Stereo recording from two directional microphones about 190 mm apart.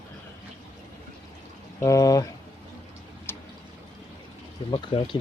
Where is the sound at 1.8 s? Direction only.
15° left (ahead or behind).